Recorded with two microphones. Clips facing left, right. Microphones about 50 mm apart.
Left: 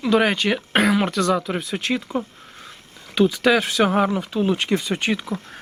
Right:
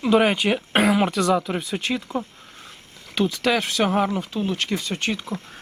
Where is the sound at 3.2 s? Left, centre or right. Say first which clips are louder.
Left 4 dB; centre.